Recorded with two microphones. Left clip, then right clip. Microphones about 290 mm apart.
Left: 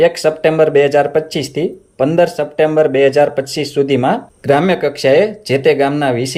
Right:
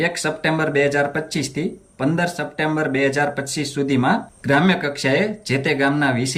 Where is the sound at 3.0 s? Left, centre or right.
Centre.